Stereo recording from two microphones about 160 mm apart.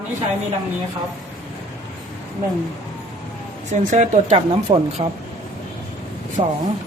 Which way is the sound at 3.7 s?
50° right (ahead or behind).